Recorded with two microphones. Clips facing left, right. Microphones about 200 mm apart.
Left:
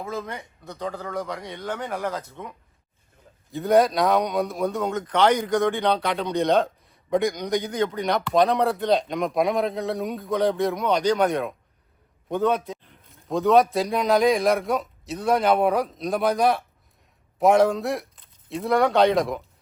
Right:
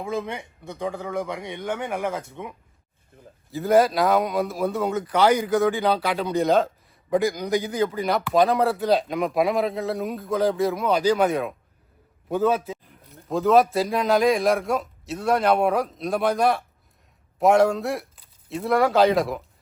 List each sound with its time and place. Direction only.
0.0 s a man's voice: 15° right (ahead or behind)
2.3 s a man's voice: 5° right (ahead or behind)